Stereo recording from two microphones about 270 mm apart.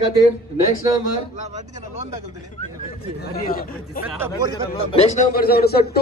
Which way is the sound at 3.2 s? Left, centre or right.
Left.